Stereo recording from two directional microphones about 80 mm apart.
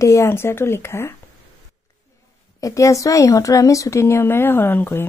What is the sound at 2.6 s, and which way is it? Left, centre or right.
Speech, left.